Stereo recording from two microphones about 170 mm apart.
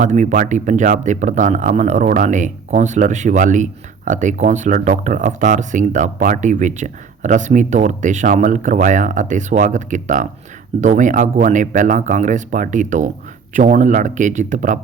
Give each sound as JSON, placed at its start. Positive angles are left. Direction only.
{"t": 0.0, "sound": "speech", "side_deg": -45}